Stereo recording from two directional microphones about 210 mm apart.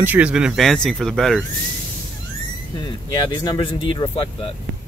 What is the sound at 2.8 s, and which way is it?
Speech, 20° left (ahead or behind).